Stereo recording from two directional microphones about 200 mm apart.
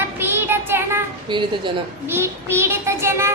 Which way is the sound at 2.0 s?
10° right (ahead or behind).